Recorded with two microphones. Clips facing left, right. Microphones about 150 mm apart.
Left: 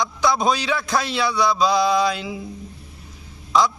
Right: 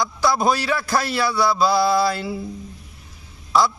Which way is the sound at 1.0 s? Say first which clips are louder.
Right 1 dB; 20° left (ahead or behind).